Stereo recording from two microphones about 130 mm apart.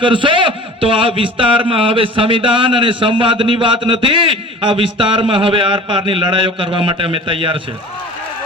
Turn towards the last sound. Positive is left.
turn(degrees=-45)  # may be behind; listen again after turning